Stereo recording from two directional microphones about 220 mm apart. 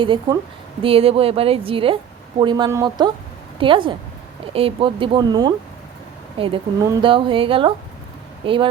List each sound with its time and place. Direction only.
0.0 s a woman's voice: 20° right (ahead or behind)